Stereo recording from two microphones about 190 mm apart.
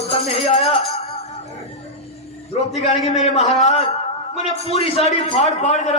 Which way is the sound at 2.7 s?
35° left (ahead or behind).